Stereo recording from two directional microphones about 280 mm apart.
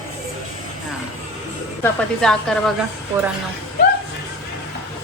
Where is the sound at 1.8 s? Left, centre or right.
Centre.